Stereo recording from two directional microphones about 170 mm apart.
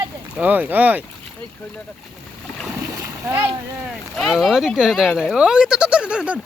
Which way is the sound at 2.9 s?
20° right (ahead or behind).